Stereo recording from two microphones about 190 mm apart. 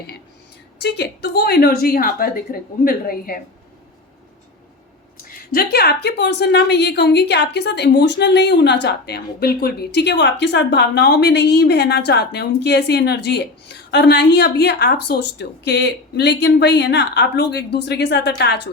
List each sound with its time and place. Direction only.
0.8 s a woman's voice: 65° left (ahead or behind)
5.3 s a woman's voice: 50° left (ahead or behind)